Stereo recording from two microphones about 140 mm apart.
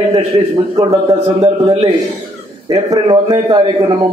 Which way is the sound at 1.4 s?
40° right (ahead or behind).